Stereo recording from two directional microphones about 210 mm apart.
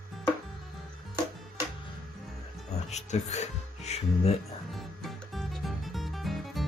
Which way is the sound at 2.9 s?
30° left (ahead or behind).